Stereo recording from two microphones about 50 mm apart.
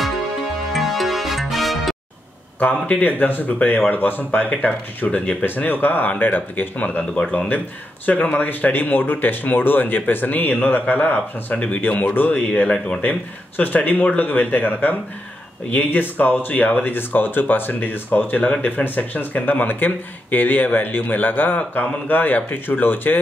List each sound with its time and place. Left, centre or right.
0.7 s music: centre
2.6 s speech: left
5.7 s speech: left
12.7 s speech: left
13.6 s speech: left